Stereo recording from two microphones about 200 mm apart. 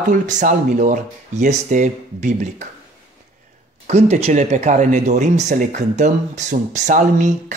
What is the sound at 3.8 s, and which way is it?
Speech, 35° right (ahead or behind).